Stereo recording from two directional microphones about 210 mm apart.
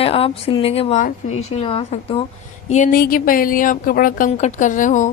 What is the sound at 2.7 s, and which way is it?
A woman's voice, 40° left (ahead or behind).